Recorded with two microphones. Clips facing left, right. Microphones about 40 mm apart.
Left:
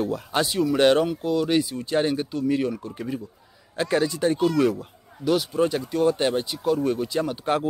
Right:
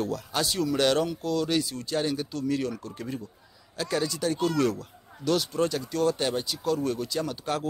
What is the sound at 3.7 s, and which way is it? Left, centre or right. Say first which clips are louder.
Speech: left 6 dB; left.